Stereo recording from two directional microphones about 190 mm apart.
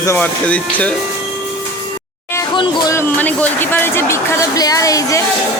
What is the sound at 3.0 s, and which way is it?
Speech, 10° left (ahead or behind).